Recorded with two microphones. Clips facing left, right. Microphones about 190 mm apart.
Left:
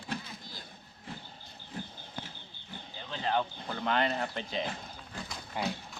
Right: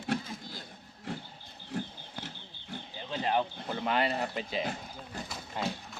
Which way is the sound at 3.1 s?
15° right (ahead or behind).